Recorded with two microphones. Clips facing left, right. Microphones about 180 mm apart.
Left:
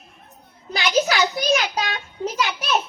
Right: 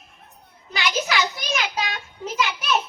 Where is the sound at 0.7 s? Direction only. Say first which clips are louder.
Left 4 dB; 40° left (ahead or behind).